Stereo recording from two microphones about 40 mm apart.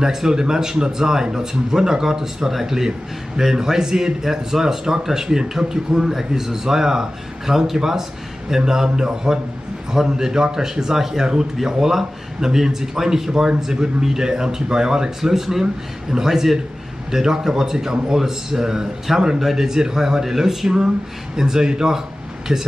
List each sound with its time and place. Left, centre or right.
0.0 s speech: centre